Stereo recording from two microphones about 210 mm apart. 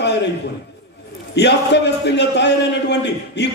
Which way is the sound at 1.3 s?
55° left (ahead or behind).